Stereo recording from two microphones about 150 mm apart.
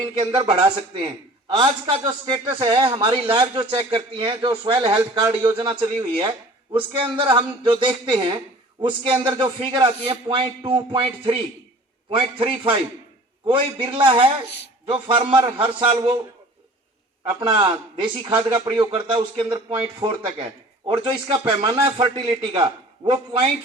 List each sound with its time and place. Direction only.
0.0 s a man's voice: 30° right (ahead or behind)
17.2 s a man's voice: 30° right (ahead or behind)